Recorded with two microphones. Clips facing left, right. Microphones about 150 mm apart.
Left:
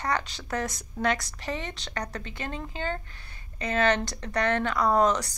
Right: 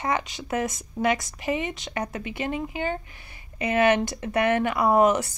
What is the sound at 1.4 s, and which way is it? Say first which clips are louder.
Speech: right 6 dB; 10° right (ahead or behind).